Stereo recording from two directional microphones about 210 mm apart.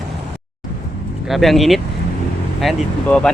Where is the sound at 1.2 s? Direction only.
Centre (ahead or behind).